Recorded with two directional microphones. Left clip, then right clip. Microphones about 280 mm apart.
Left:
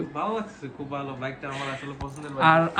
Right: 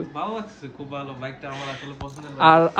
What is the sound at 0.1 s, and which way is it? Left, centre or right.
Speech, centre.